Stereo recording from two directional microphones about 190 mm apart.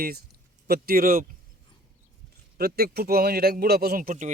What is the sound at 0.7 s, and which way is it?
Speech, 50° right (ahead or behind).